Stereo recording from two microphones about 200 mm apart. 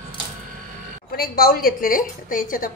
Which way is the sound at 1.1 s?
50° left (ahead or behind).